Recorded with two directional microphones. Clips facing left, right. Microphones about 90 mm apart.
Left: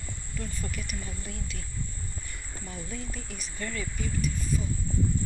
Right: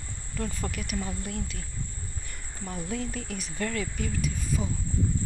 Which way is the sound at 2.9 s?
65° right (ahead or behind).